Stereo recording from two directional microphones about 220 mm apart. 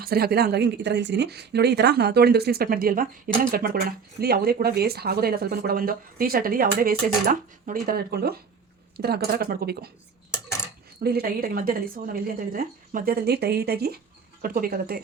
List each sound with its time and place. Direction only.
0.0 s speech: 45° right (ahead or behind)
11.0 s speech: 45° right (ahead or behind)